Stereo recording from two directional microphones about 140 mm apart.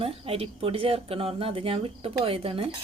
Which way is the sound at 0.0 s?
45° right (ahead or behind).